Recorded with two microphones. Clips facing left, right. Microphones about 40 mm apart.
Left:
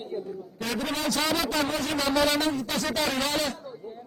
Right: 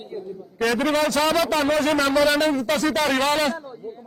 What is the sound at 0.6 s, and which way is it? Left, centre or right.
A man's voice, right.